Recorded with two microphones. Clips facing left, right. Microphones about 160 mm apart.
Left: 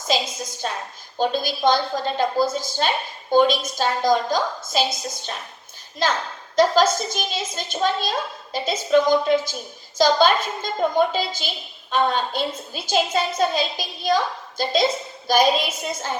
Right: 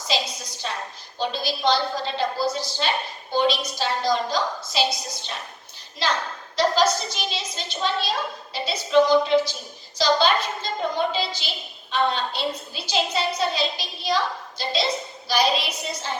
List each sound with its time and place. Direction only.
0.1 s a sound: 50° left (ahead or behind)
1.2 s a woman's voice: 50° left (ahead or behind)
6.0 s a woman's voice: 45° left (ahead or behind)